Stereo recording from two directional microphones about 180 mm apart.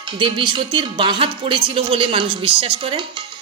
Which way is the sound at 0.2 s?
25° right (ahead or behind).